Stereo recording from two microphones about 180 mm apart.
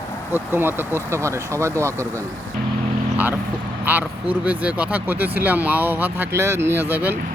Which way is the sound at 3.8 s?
10° right (ahead or behind).